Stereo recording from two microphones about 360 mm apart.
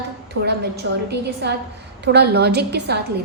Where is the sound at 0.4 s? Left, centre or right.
Right.